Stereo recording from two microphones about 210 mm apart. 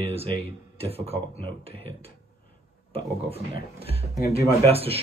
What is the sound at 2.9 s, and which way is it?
Speech, 25° right (ahead or behind).